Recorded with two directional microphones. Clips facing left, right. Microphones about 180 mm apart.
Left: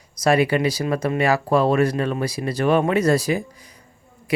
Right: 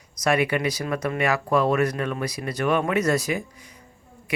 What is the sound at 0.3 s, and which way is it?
Speech, 30° left (ahead or behind).